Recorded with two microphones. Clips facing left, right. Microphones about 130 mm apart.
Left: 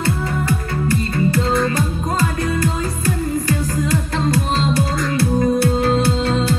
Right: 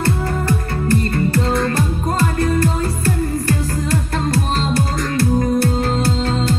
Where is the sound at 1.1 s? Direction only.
45° right (ahead or behind).